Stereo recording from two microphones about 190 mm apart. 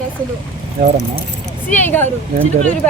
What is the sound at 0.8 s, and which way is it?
Speech, 50° right (ahead or behind).